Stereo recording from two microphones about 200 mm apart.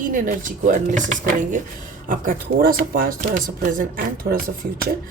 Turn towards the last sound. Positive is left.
turn(degrees=-45)  # may be behind; listen again after turning